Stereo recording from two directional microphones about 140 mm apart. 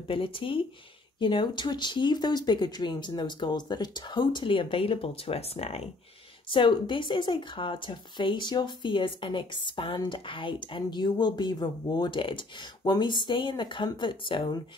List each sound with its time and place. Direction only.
0.1 s speech: 40° left (ahead or behind)
6.5 s speech: 35° left (ahead or behind)